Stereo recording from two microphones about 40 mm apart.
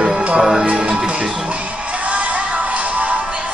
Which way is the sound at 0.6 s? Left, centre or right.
Right.